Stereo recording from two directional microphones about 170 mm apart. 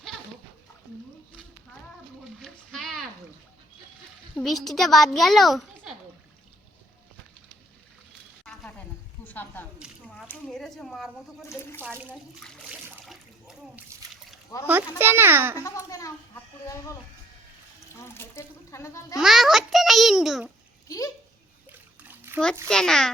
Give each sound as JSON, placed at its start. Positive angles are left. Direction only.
{"t": 2.4, "sound": "a sound", "side_deg": 0}
{"t": 4.4, "sound": "a child's voice", "side_deg": 0}
{"t": 9.2, "sound": "a sound", "side_deg": 10}
{"t": 9.7, "sound": "a sound", "side_deg": -5}
{"t": 11.8, "sound": "a child's voice", "side_deg": -10}
{"t": 12.4, "sound": "water", "side_deg": 0}
{"t": 14.7, "sound": "a child's voice", "side_deg": -10}
{"t": 15.6, "sound": "a child's voice", "side_deg": 20}
{"t": 18.0, "sound": "speech", "side_deg": 15}
{"t": 19.2, "sound": "a child's voice", "side_deg": 0}
{"t": 20.8, "sound": "speech", "side_deg": 20}
{"t": 21.7, "sound": "splash", "side_deg": -10}
{"t": 22.7, "sound": "speech", "side_deg": 5}